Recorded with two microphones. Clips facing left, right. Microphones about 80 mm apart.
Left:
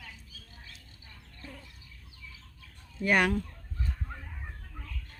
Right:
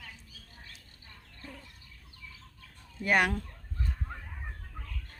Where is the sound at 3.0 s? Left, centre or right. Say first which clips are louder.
Left 1 dB; right.